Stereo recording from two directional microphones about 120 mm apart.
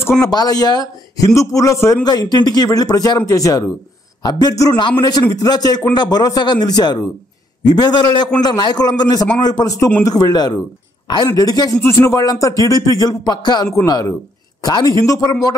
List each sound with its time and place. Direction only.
0.2 s a man's voice: 30° left (ahead or behind)